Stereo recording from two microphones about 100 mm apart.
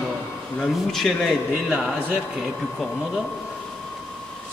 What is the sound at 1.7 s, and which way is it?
Speech, 10° right (ahead or behind).